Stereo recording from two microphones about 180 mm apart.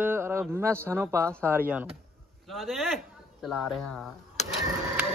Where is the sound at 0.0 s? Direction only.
15° right (ahead or behind).